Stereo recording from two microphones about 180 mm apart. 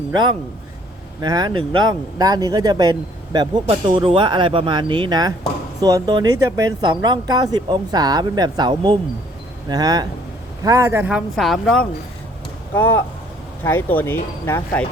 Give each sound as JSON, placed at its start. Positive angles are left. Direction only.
{"t": 1.2, "sound": "a man's voice", "side_deg": -20}